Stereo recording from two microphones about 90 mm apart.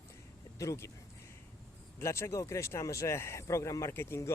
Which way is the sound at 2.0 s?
30° left (ahead or behind).